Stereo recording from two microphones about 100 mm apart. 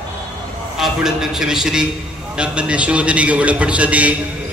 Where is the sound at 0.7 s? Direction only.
5° right (ahead or behind).